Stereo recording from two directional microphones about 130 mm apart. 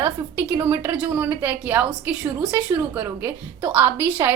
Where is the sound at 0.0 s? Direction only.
15° right (ahead or behind).